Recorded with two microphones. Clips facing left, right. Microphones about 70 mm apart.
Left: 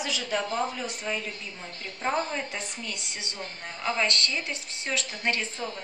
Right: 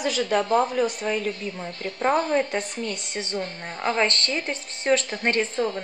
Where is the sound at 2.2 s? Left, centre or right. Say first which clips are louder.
Right 10 dB; right.